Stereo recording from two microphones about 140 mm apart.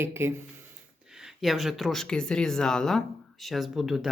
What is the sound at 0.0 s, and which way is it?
Speech, 15° right (ahead or behind).